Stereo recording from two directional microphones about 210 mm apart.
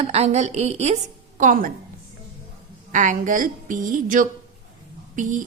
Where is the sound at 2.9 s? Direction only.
35° right (ahead or behind).